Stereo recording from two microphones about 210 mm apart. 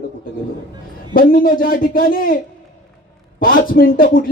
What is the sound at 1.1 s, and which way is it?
Speech, 40° left (ahead or behind).